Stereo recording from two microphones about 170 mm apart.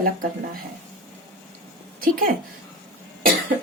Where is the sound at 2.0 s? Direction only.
55° right (ahead or behind).